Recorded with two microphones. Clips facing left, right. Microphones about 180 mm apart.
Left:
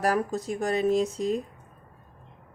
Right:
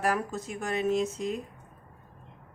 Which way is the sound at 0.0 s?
35° left (ahead or behind).